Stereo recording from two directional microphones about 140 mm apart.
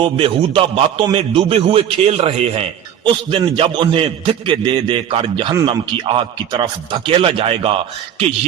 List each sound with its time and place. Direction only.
0.0 s a man's voice: 40° right (ahead or behind)